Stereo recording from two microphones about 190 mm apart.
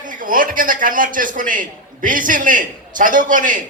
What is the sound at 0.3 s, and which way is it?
A man's voice, 45° right (ahead or behind).